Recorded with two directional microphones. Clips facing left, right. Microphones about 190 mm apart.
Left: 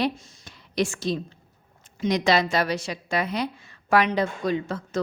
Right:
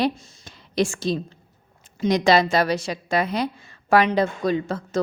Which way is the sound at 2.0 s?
35° right (ahead or behind).